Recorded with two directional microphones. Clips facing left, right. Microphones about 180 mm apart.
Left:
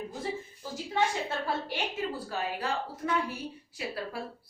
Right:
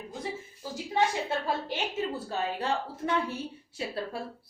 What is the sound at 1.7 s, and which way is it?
Speech, 25° right (ahead or behind).